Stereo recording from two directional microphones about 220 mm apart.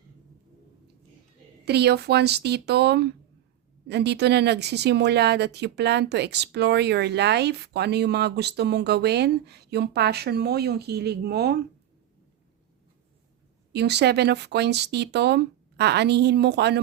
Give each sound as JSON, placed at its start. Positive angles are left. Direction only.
{"t": 1.6, "sound": "a woman's voice", "side_deg": -50}
{"t": 13.7, "sound": "a woman's voice", "side_deg": -50}